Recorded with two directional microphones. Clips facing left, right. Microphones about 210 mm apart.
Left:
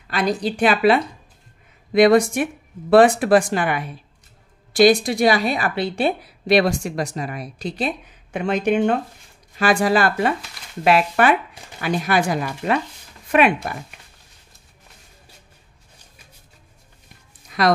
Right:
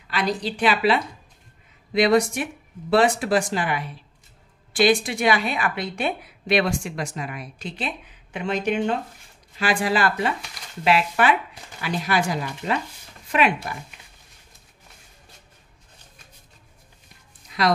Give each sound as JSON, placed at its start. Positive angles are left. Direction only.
{"t": 0.1, "sound": "a woman's voice", "side_deg": 50}
{"t": 4.7, "sound": "a woman's voice", "side_deg": 40}
{"t": 17.5, "sound": "dog", "side_deg": 55}